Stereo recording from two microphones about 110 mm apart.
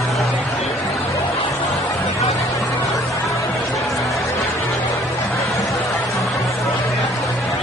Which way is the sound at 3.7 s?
Centre (ahead or behind).